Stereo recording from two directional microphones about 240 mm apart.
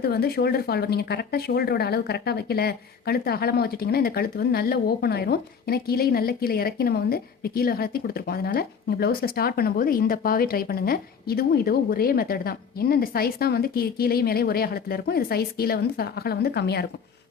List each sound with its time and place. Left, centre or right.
0.0 s speech: left